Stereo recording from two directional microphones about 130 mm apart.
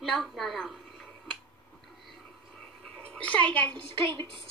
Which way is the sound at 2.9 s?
10° left (ahead or behind).